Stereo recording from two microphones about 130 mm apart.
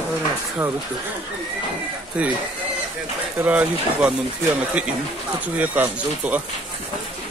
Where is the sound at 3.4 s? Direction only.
10° right (ahead or behind).